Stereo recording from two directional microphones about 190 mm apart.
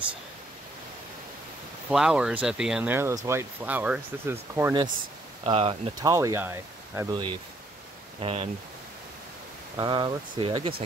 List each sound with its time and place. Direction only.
1.9 s speech: 5° right (ahead or behind)
5.4 s speech: 30° right (ahead or behind)
6.0 s speech: 15° right (ahead or behind)
8.2 s speech: 30° right (ahead or behind)
9.8 s speech: 25° right (ahead or behind)